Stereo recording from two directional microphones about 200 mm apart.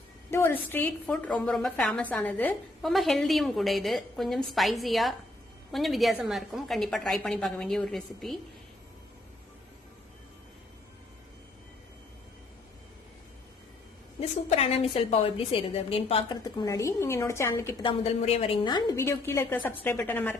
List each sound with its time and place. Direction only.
0.3 s a woman's voice: 10° left (ahead or behind)
14.2 s a woman's voice: 30° left (ahead or behind)
16.4 s a woman's voice: 15° left (ahead or behind)
17.8 s a woman's voice: 30° left (ahead or behind); by 20.3 s 10° left (ahead or behind)